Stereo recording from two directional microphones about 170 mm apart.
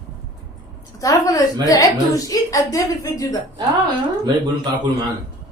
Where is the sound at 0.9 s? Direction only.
20° left (ahead or behind).